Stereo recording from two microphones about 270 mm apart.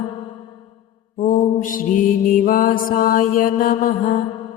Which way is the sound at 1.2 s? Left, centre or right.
Left.